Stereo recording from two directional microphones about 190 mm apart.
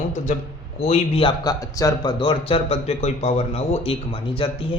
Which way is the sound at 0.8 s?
30° left (ahead or behind).